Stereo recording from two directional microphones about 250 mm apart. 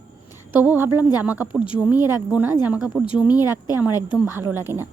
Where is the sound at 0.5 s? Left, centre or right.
Centre.